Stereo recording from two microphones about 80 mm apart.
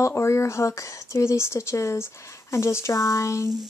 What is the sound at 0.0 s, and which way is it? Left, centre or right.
Speech, left.